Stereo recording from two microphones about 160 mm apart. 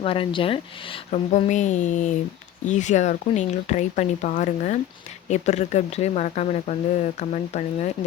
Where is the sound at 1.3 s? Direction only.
50° left (ahead or behind).